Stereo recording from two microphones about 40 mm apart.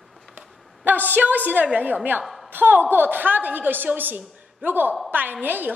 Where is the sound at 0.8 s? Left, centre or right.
Right.